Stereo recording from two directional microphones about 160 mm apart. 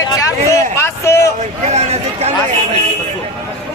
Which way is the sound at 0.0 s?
20° left (ahead or behind).